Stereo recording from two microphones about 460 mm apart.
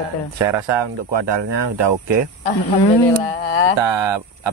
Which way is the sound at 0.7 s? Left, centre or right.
Right.